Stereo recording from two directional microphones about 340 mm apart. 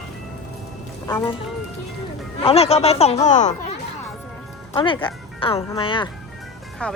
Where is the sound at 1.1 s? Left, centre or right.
Centre.